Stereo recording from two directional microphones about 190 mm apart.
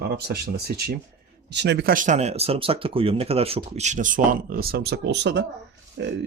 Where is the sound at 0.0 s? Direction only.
55° right (ahead or behind).